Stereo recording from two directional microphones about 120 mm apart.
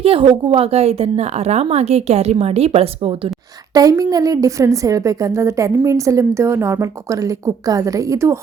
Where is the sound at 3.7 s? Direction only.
30° right (ahead or behind).